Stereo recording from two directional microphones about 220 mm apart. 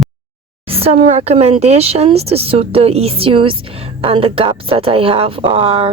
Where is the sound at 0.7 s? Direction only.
25° right (ahead or behind).